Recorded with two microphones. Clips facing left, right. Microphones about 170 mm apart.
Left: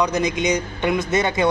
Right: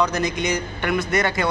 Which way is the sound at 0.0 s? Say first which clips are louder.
Left 2 dB; 15° left (ahead or behind).